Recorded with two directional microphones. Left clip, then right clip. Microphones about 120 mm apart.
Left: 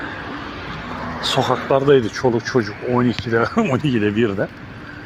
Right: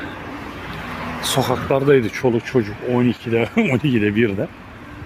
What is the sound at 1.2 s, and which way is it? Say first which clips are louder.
Speech: left 2 dB; 45° right (ahead or behind).